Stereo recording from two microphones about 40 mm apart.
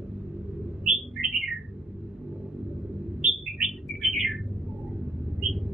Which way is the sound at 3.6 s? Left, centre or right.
Centre.